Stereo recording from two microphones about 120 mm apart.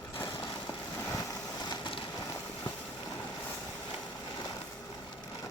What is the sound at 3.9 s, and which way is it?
Vehicle, 35° left (ahead or behind).